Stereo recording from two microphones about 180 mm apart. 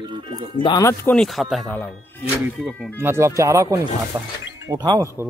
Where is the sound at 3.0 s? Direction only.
15° right (ahead or behind).